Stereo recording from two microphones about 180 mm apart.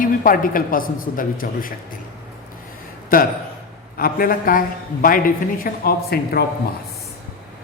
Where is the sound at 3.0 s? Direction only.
50° left (ahead or behind).